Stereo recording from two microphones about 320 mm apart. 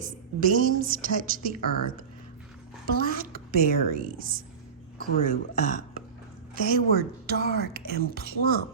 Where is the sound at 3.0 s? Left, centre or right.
Right.